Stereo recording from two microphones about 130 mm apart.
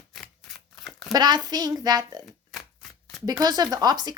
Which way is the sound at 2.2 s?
Centre (ahead or behind).